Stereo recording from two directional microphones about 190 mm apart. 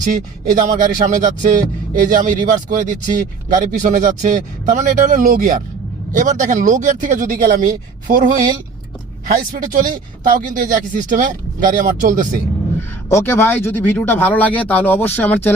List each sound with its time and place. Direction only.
0.0 s speech: 40° right (ahead or behind)
13.1 s speech: 15° left (ahead or behind)